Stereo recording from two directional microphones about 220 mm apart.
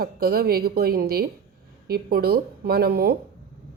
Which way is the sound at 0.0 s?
45° right (ahead or behind).